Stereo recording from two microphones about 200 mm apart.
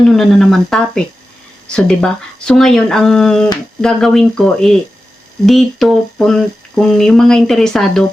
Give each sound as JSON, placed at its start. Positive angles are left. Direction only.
{"t": 0.1, "sound": "speech", "side_deg": 0}